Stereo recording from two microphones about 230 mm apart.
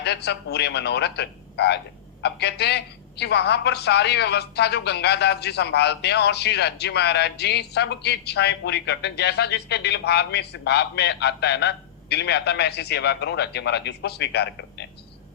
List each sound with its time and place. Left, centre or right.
0.0 s a woman's voice: left